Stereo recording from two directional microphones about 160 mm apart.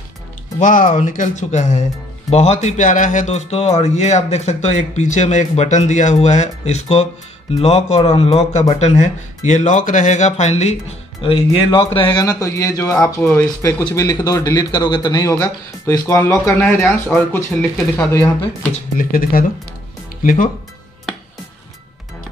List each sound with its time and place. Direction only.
0.6 s a man's voice: 55° left (ahead or behind); by 13.0 s 20° left (ahead or behind)
13.0 s speech: 5° left (ahead or behind)
18.9 s speech: 65° left (ahead or behind)